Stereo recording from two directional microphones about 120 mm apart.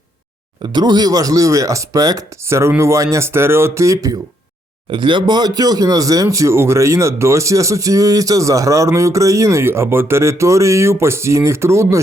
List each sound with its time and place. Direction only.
0.6 s speech: 40° right (ahead or behind)
4.9 s speech: 45° right (ahead or behind); by 11.9 s 25° right (ahead or behind)